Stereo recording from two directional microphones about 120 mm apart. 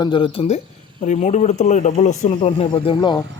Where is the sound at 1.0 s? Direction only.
80° left.